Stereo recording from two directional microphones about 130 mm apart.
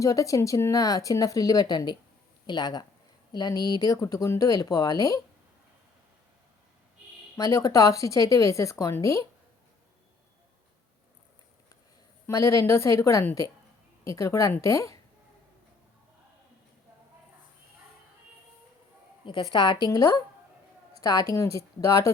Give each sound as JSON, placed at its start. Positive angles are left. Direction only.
{"t": 0.0, "sound": "a woman's voice", "side_deg": 25}
{"t": 7.3, "sound": "speech", "side_deg": 25}
{"t": 12.2, "sound": "speech", "side_deg": 25}
{"t": 19.2, "sound": "a woman's voice", "side_deg": 40}